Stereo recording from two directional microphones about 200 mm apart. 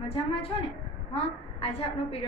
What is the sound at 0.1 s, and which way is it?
A woman's voice, 25° left (ahead or behind).